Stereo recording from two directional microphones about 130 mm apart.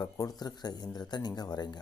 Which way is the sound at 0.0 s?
30° left (ahead or behind).